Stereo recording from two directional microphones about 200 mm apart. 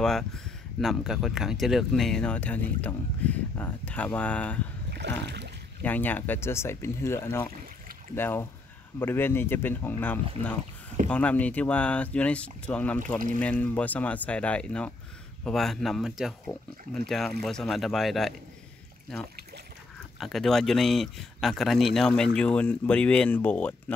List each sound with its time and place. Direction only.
0.0 s speech: centre (ahead or behind)
5.2 s a sound: 60° right (ahead or behind)
5.8 s speech: 10° left (ahead or behind)
20.2 s speech: centre (ahead or behind)